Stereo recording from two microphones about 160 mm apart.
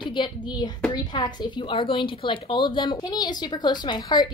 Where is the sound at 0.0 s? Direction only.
30° left (ahead or behind).